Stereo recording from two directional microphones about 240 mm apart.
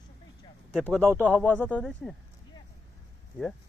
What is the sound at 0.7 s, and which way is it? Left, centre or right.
Speech, centre.